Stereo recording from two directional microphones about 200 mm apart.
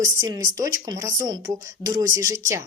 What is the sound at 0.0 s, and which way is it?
Speech, 15° right (ahead or behind).